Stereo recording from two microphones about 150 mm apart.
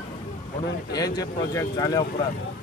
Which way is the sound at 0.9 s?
25° left (ahead or behind).